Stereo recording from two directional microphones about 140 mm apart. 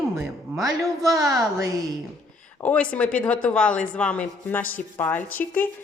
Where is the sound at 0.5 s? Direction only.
20° right (ahead or behind).